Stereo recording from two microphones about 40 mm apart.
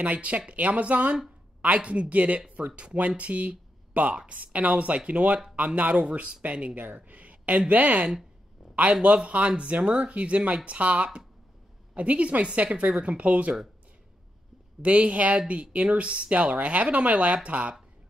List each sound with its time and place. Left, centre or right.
0.0 s speech: right
14.8 s speech: right